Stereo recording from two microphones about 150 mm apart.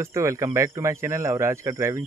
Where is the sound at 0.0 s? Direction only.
20° right (ahead or behind).